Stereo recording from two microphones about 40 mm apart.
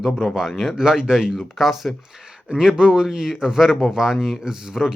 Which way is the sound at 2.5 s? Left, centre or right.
Right.